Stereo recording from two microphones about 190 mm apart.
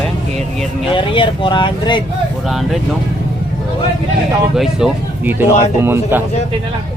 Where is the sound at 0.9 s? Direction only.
25° left (ahead or behind).